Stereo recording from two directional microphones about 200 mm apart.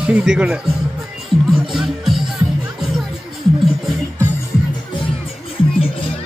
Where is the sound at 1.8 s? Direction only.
Centre (ahead or behind).